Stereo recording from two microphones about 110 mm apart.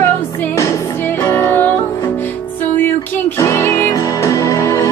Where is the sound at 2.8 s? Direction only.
20° left (ahead or behind).